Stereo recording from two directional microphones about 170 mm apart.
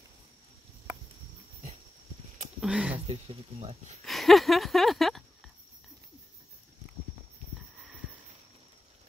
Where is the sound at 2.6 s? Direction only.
5° right (ahead or behind).